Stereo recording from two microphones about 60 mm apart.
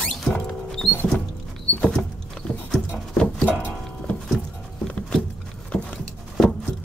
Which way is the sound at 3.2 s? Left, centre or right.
Centre.